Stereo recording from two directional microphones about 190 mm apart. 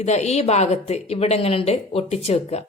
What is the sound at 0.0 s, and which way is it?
A woman's voice, 35° left (ahead or behind).